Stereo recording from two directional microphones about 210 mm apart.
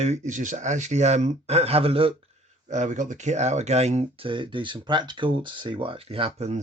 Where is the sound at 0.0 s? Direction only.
35° right (ahead or behind).